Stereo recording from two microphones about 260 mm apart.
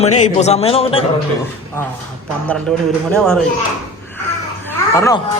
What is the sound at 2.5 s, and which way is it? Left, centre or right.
Speech, centre.